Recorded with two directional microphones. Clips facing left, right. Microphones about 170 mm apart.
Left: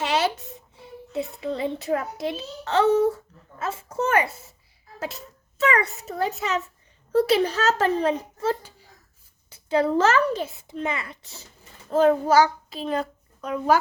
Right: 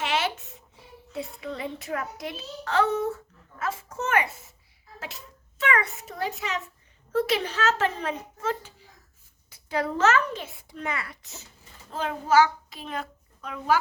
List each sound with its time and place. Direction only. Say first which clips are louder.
0.0 s a sound: left 4 dB; 35° left (ahead or behind)
1.1 s a child's voice: left 6 dB; 25° left (ahead or behind)
11.9 s a child's voice: left 8 dB; 45° left (ahead or behind)